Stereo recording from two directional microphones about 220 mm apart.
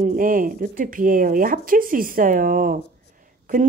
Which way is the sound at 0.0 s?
40° right (ahead or behind).